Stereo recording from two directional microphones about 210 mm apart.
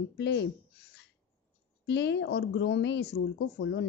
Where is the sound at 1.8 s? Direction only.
55° left (ahead or behind).